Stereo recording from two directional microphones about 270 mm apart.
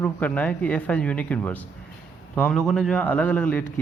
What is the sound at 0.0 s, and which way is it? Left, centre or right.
A man's voice, centre.